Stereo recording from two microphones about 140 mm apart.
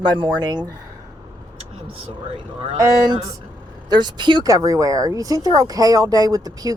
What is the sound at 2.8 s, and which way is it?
Speech, 25° right (ahead or behind).